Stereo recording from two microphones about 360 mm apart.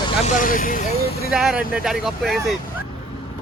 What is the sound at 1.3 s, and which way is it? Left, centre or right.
Speech, centre.